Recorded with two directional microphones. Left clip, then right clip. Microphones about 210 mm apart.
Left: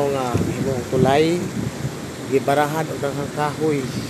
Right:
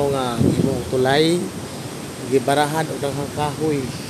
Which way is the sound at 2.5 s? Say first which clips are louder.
Even; 20° right (ahead or behind).